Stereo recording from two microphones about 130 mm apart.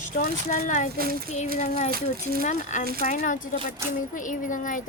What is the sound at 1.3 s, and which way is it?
Speech, 60° left (ahead or behind).